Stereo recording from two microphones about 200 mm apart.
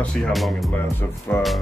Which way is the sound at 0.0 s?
5° left (ahead or behind).